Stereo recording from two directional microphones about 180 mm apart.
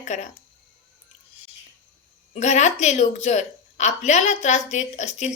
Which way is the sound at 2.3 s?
40° left (ahead or behind).